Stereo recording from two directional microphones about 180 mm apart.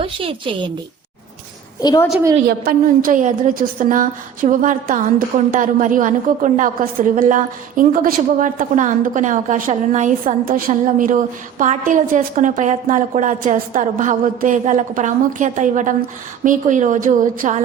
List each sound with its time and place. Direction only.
0.0 s a woman's voice: 30° right (ahead or behind)
1.8 s a woman's voice: 20° left (ahead or behind)
2.5 s a woman's voice: 55° right (ahead or behind)